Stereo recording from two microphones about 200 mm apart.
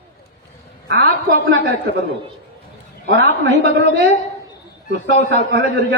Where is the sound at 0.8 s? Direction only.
60° right (ahead or behind).